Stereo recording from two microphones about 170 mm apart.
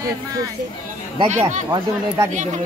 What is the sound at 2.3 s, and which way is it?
Speech, 45° right (ahead or behind).